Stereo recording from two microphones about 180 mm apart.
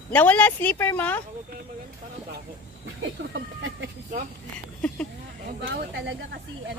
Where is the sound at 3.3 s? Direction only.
90° right.